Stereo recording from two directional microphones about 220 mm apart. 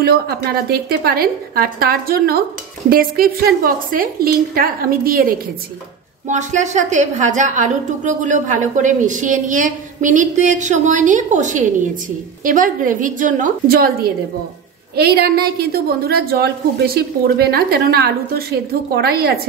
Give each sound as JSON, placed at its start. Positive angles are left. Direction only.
{"t": 0.0, "sound": "a woman's voice", "side_deg": -45}